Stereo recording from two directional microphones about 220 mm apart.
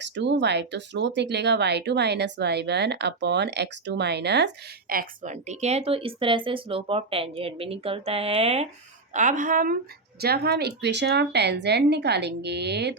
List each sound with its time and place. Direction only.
0.0 s a woman's voice: 55° right (ahead or behind)